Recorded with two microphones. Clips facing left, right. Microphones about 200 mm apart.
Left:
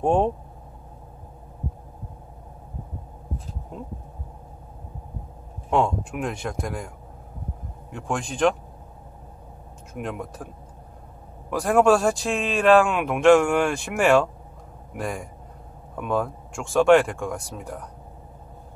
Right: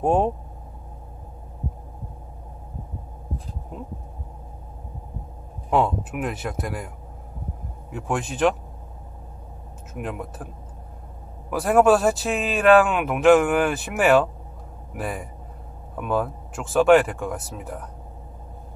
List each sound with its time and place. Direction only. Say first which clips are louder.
0.0 s speech: even; 5° right (ahead or behind)
3.7 s speech: even; 5° right (ahead or behind)
5.7 s speech: right 1 dB; 5° right (ahead or behind)
7.9 s speech: right 2 dB; 5° right (ahead or behind)
9.9 s speech: even; 5° right (ahead or behind)
11.5 s speech: right 1 dB; 5° right (ahead or behind)